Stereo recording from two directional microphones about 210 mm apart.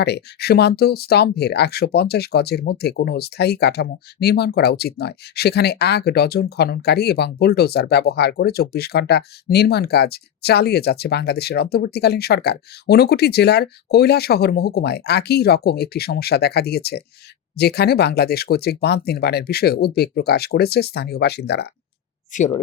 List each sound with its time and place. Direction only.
0.0 s speech: 50° left (ahead or behind)
22.3 s speech: 35° left (ahead or behind)